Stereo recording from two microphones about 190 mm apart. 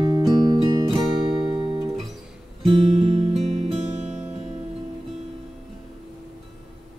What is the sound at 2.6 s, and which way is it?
Music, 30° right (ahead or behind).